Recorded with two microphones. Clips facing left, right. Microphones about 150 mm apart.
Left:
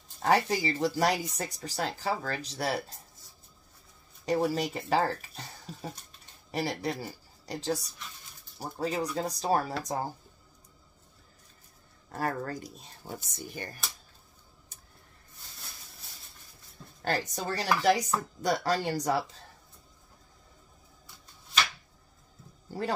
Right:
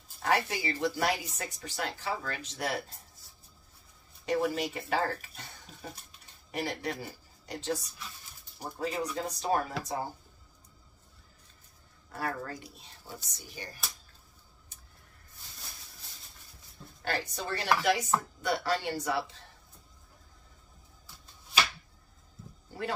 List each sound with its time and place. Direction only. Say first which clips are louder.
0.2 s speech: left 4 dB; 35° left (ahead or behind)
4.3 s a woman's voice: left 2 dB; 35° left (ahead or behind)
12.1 s speech: left 3 dB; 40° left (ahead or behind)
17.0 s speech: left 3 dB; 40° left (ahead or behind)
22.7 s speech: left 3 dB; 35° left (ahead or behind)